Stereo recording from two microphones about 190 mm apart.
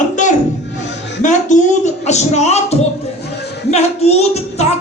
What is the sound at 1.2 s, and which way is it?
Speech, 40° left (ahead or behind).